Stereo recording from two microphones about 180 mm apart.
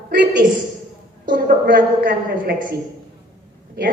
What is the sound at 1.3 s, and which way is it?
A woman's voice, 55° right (ahead or behind).